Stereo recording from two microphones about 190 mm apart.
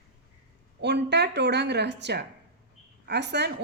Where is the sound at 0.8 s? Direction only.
60° right (ahead or behind).